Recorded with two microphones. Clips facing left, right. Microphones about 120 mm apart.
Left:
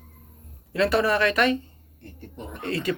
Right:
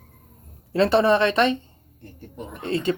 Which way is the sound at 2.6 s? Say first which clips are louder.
Right 3 dB; 25° right (ahead or behind).